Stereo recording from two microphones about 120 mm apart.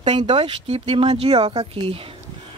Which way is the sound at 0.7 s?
55° right (ahead or behind).